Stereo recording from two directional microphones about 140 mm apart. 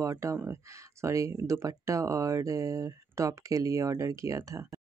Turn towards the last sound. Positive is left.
turn(degrees=-20)  # may be behind; listen again after turning